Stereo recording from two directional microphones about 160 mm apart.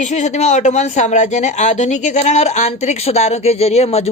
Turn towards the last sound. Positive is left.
turn(degrees=40)  # may be behind; listen again after turning